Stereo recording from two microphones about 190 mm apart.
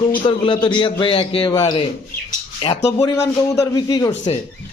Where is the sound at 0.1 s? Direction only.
25° left (ahead or behind).